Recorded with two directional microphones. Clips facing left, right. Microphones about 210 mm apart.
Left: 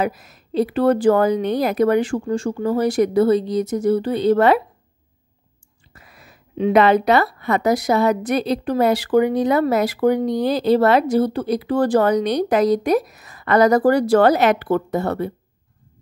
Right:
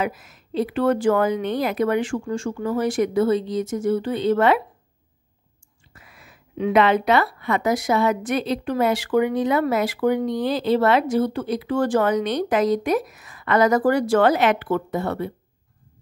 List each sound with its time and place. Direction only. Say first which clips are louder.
0.0 s speech: left 3 dB; 40° left (ahead or behind)
5.9 s speech: left 2 dB; 40° left (ahead or behind)